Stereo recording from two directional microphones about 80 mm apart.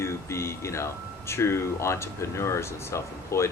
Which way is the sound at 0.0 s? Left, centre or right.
Left.